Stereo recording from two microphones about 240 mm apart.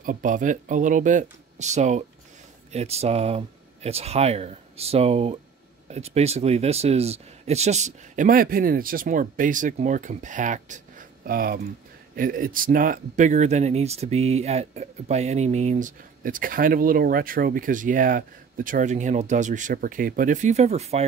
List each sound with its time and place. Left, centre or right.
0.0 s speech: right